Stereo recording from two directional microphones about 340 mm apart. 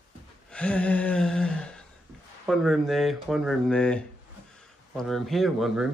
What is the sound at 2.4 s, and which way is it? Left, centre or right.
Speech, centre.